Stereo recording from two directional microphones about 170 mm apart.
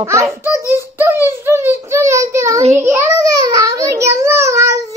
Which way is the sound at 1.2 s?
15° right (ahead or behind).